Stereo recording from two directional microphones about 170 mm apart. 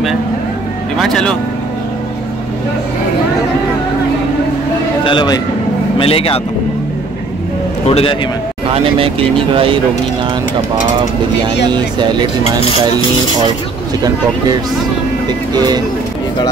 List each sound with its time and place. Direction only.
0.9 s speech: 5° left (ahead or behind)
5.0 s speech: 25° left (ahead or behind)
7.8 s a man's voice: 35° left (ahead or behind)
8.6 s speech: 30° right (ahead or behind)
11.7 s speech: 25° right (ahead or behind)
15.2 s speech: 25° right (ahead or behind)